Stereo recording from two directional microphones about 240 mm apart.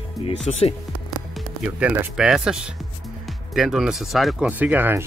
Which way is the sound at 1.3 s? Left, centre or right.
Centre.